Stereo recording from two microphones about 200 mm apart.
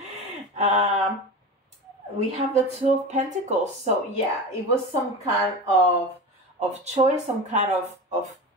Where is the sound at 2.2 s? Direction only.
30° right (ahead or behind).